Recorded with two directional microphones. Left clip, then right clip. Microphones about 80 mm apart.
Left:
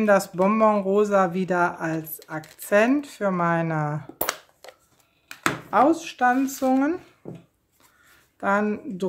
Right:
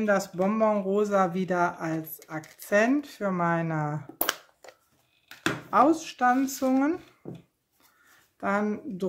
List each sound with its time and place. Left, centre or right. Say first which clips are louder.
0.0 s speech: left 6 dB; left
0.9 s speech: left 4 dB; left
4.2 s a sound: left 1 dB; centre
5.7 s speech: left 2 dB; centre
7.2 s a sound: left 3 dB; right
8.4 s speech: left 5 dB; centre